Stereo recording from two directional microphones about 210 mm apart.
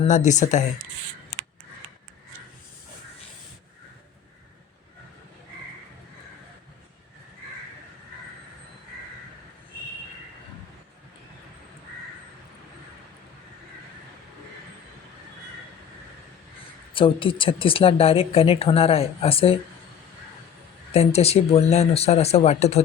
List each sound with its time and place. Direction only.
0.0 s speech: 35° left (ahead or behind)
16.9 s speech: 25° left (ahead or behind)
20.9 s speech: 30° left (ahead or behind)